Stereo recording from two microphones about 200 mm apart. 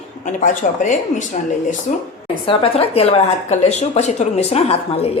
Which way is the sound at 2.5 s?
30° left (ahead or behind).